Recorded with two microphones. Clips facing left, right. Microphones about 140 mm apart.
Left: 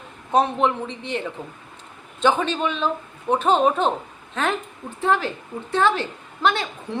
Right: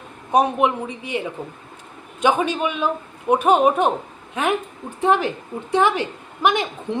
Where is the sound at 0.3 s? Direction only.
15° right (ahead or behind).